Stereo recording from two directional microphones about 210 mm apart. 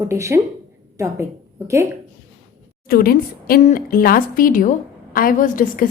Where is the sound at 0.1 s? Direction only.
15° right (ahead or behind).